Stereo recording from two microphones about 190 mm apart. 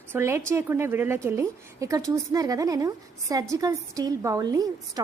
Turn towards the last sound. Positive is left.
turn(degrees=-20)  # may be behind; listen again after turning